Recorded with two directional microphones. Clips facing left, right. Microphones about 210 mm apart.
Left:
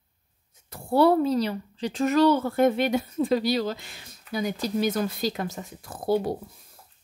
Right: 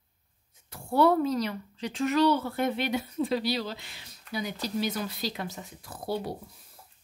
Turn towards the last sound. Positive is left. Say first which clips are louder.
# left 8 dB
turn(degrees=50)  # may be behind; listen again after turning